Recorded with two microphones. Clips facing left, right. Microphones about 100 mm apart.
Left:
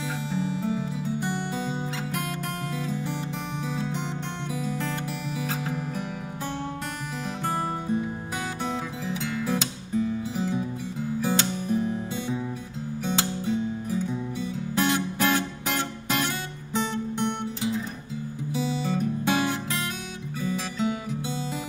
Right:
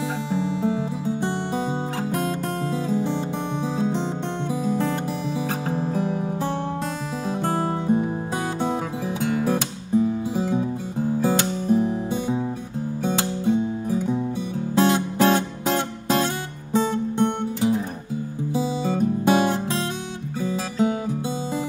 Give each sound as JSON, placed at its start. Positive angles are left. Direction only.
{"t": 1.0, "sound": "music", "side_deg": -25}
{"t": 20.3, "sound": "guitar", "side_deg": -25}